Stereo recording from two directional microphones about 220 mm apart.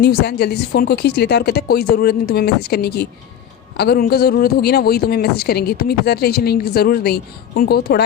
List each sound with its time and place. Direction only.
0.0 s speech: 50° left (ahead or behind)